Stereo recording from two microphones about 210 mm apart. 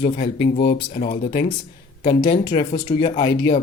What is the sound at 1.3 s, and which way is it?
Speech, 50° left (ahead or behind).